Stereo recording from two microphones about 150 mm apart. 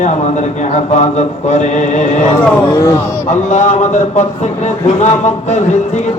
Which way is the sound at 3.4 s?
50° left (ahead or behind).